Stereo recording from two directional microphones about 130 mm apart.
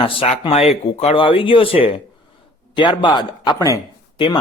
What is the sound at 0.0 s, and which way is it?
Speech, 40° left (ahead or behind).